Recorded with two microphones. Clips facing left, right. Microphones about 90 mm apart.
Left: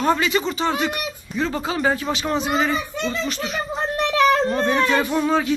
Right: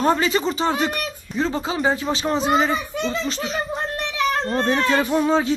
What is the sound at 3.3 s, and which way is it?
Speech, 30° right (ahead or behind).